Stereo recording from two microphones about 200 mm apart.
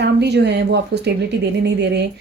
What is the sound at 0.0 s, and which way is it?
Speech, 55° right (ahead or behind).